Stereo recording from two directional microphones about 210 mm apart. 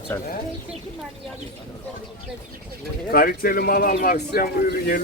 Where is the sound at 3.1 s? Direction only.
45° left (ahead or behind).